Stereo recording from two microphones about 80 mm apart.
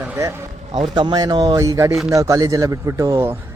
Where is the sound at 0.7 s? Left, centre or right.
Right.